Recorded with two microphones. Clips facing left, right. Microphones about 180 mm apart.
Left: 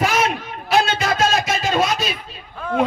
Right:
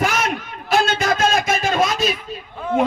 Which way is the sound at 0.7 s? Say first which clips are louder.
Even; 50° right (ahead or behind).